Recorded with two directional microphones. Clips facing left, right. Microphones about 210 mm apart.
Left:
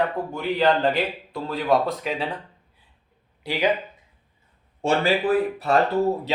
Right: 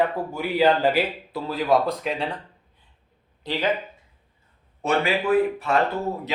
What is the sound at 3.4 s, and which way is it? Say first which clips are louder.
Speech: left 2 dB; 10° left (ahead or behind).